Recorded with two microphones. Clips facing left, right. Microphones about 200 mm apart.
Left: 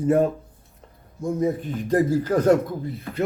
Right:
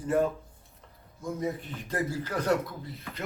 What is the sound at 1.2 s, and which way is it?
A man's voice, 45° left (ahead or behind).